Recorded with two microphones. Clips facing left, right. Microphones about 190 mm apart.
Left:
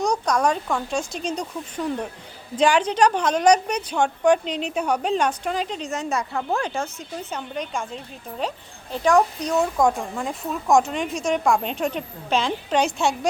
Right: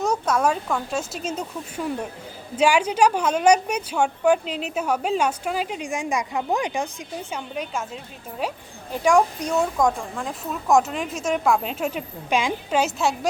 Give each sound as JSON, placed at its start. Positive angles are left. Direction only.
{"t": 0.0, "sound": "a woman's voice", "side_deg": -5}
{"t": 9.6, "sound": "speech", "side_deg": 5}